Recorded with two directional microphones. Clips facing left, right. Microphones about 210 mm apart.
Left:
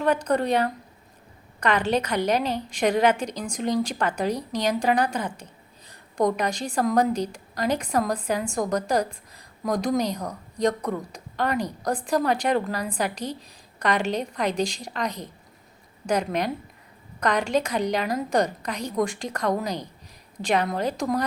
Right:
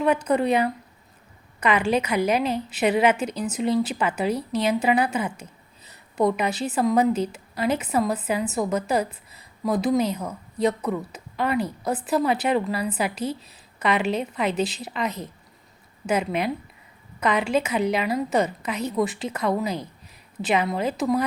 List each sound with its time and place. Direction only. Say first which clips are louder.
0.0 s a woman's voice: right 2 dB; 5° right (ahead or behind)